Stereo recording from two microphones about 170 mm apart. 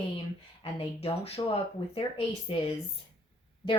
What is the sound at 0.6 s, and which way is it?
Speech, 35° left (ahead or behind).